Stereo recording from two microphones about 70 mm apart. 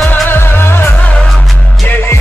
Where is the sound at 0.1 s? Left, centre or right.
Left.